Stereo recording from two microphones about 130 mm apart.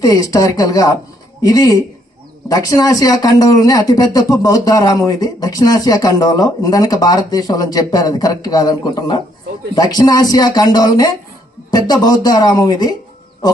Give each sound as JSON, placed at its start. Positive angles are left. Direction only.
{"t": 0.0, "sound": "speech", "side_deg": 25}